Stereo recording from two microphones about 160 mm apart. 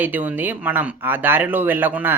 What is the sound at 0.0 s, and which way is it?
Speech, 10° right (ahead or behind).